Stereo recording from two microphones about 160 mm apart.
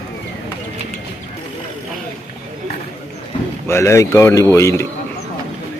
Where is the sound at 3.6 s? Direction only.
15° left (ahead or behind).